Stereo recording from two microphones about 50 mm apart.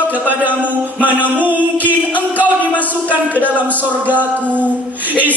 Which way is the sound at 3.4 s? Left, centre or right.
Right.